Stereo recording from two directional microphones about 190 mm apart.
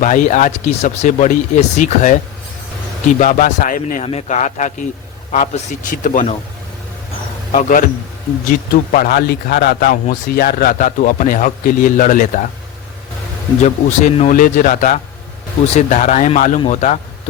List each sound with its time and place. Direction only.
0.0 s a man's voice: 40° left (ahead or behind)
7.5 s a man's voice: 45° left (ahead or behind)
13.6 s a man's voice: 35° left (ahead or behind)